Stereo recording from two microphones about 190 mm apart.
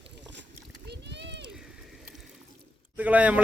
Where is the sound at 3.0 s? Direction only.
10° right (ahead or behind).